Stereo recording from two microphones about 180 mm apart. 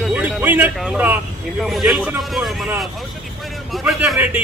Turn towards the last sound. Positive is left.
turn(degrees=-5)  # may be behind; listen again after turning